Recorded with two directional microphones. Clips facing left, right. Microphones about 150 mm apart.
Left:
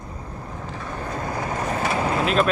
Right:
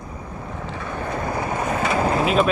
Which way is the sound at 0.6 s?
80° right.